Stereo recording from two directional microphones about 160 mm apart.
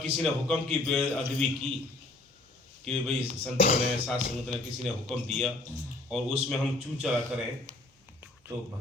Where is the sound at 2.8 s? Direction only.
5° left (ahead or behind).